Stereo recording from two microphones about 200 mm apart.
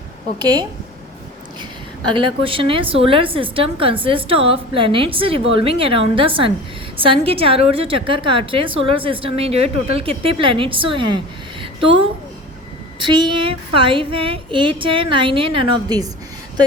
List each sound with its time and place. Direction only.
0.3 s a woman's voice: 20° right (ahead or behind)
2.0 s a woman's voice: 25° right (ahead or behind)
11.6 s a sound: 25° right (ahead or behind)
13.0 s a woman's voice: 25° right (ahead or behind)